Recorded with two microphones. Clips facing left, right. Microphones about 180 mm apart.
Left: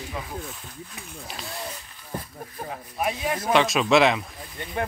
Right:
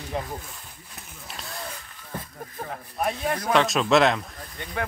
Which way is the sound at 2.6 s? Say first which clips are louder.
Even; 5° left (ahead or behind).